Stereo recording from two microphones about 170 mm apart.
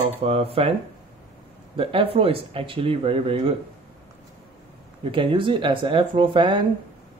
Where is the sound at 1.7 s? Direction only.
30° right (ahead or behind).